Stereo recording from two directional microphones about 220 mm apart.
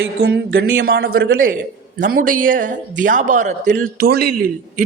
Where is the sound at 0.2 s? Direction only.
45° right (ahead or behind).